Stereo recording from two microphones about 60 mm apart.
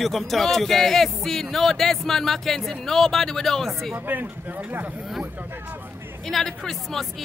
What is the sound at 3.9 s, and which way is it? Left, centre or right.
Speech, right.